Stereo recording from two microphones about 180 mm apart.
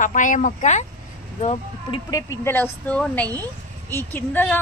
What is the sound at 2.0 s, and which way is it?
A woman's voice, 15° left (ahead or behind).